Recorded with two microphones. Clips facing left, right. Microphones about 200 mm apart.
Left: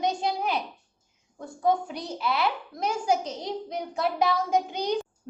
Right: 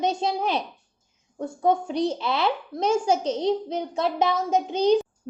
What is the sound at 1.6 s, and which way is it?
A child's voice, 25° right (ahead or behind).